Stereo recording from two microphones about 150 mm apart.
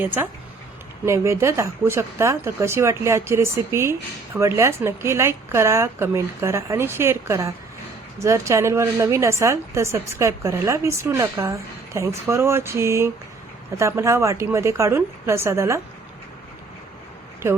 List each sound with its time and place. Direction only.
0.0 s a woman's voice: 15° right (ahead or behind)